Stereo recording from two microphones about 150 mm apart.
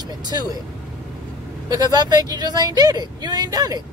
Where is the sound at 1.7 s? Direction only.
25° right (ahead or behind).